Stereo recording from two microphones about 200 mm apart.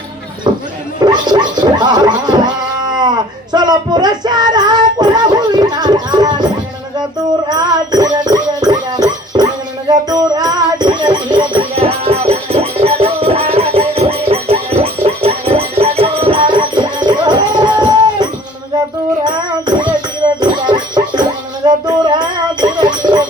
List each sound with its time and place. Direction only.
0.5 s horse: 25° right (ahead or behind)
1.0 s gargling: 20° right (ahead or behind)
3.5 s music: 20° right (ahead or behind)
7.5 s music: 20° right (ahead or behind)